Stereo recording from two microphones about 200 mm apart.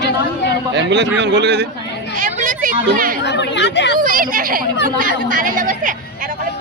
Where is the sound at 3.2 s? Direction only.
60° left (ahead or behind).